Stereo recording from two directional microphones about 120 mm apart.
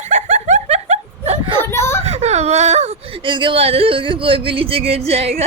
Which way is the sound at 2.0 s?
65° right (ahead or behind).